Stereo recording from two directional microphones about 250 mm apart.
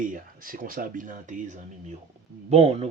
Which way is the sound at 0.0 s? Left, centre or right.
Right.